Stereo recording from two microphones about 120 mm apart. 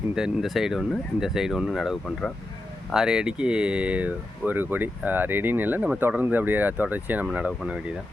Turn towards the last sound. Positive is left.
turn(degrees=-10)  # may be behind; listen again after turning